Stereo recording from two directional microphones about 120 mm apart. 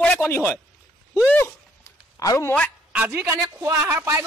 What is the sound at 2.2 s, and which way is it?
Speech, 30° left (ahead or behind).